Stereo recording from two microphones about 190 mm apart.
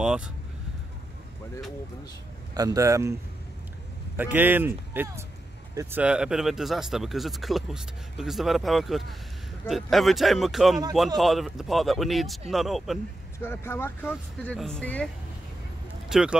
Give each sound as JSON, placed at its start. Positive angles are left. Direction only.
{"t": 0.0, "sound": "speech", "side_deg": -5}
{"t": 2.5, "sound": "speech", "side_deg": -20}
{"t": 4.2, "sound": "speech", "side_deg": -10}
{"t": 13.4, "sound": "speech", "side_deg": 15}
{"t": 16.1, "sound": "speech", "side_deg": -5}